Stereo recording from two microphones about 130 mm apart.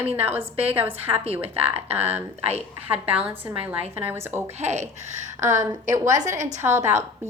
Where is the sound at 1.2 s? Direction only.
50° right (ahead or behind).